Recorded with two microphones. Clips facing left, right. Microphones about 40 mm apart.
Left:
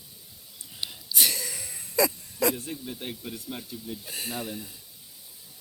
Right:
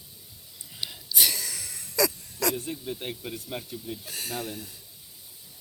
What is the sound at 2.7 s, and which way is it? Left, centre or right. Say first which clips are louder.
Speech: right 2 dB; centre.